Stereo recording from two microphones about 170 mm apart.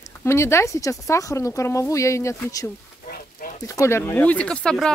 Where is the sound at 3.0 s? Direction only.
60° left (ahead or behind).